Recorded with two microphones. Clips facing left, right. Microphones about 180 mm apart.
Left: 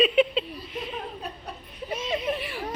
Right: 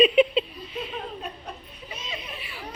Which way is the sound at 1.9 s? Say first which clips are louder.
Left 11 dB; 50° left (ahead or behind).